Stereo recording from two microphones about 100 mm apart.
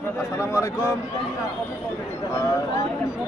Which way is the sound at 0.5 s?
25° left (ahead or behind).